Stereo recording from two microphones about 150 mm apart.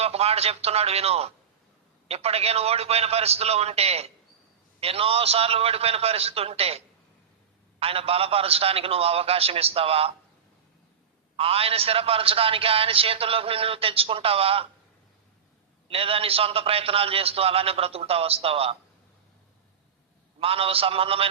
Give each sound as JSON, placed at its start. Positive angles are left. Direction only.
{"t": 0.0, "sound": "a man's voice", "side_deg": -45}
{"t": 11.3, "sound": "a man's voice", "side_deg": -40}
{"t": 15.9, "sound": "a man's voice", "side_deg": -40}
{"t": 20.4, "sound": "a man's voice", "side_deg": -40}